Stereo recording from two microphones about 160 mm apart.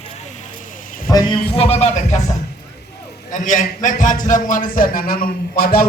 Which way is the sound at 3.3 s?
55° left (ahead or behind).